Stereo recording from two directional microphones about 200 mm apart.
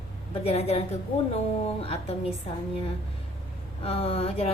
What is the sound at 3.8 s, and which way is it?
Speech, 30° left (ahead or behind).